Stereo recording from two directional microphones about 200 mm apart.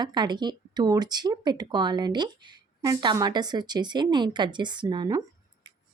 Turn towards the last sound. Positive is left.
turn(degrees=-20)  # may be behind; listen again after turning